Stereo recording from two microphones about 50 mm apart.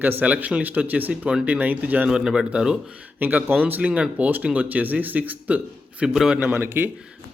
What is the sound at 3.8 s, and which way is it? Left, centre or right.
A man's voice, right.